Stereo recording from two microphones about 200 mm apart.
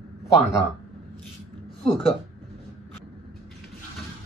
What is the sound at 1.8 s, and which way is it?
Speech, 25° left (ahead or behind).